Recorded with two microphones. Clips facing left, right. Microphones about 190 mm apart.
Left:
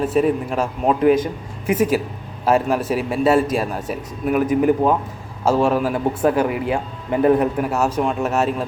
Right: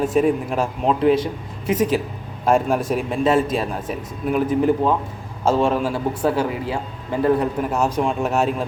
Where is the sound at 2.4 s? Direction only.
5° left (ahead or behind).